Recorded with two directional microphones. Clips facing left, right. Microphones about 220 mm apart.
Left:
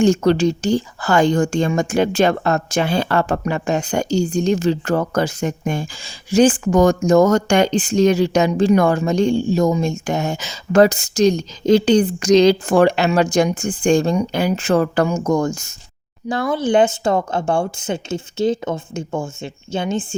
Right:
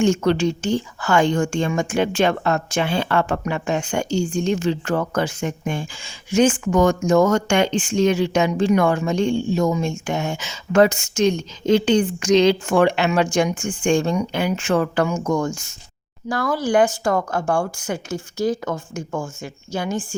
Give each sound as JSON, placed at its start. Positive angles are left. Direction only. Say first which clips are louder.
{"t": 0.0, "sound": "speech", "louder": "left 3 dB", "side_deg": 35}
{"t": 16.3, "sound": "speech", "louder": "left 2 dB", "side_deg": 20}